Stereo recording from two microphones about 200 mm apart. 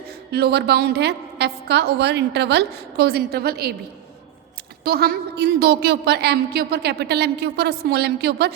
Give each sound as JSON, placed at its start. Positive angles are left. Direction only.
{"t": 0.3, "sound": "a woman's voice", "side_deg": -55}
{"t": 4.8, "sound": "a woman's voice", "side_deg": -50}